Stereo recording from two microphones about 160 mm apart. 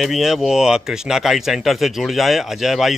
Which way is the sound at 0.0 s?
Centre (ahead or behind).